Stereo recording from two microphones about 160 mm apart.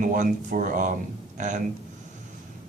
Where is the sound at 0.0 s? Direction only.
55° right (ahead or behind).